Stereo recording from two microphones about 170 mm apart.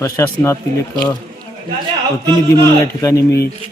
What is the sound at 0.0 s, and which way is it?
Speech, 15° left (ahead or behind).